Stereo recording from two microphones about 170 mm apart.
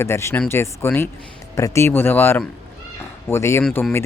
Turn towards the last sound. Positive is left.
turn(degrees=15)  # may be behind; listen again after turning